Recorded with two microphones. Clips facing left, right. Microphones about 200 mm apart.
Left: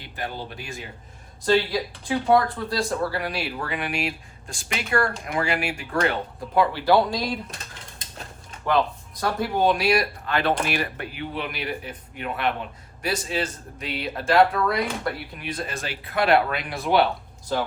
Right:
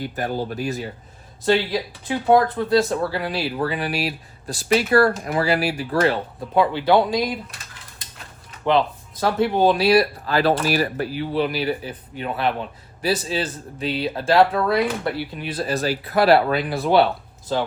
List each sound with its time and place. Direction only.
0.0 s speech: 45° right (ahead or behind)
1.5 s speech: 25° right (ahead or behind)
6.5 s speech: 20° right (ahead or behind)
9.2 s speech: 30° right (ahead or behind)